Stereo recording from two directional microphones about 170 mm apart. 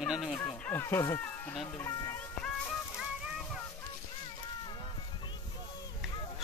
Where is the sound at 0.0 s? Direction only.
Centre (ahead or behind).